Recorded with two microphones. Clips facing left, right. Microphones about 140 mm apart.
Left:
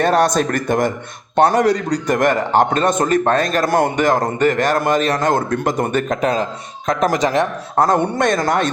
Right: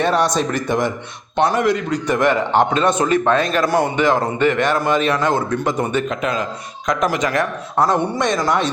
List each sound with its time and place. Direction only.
0.0 s a man's voice: 45° left (ahead or behind)
7.8 s a man's voice: 50° left (ahead or behind)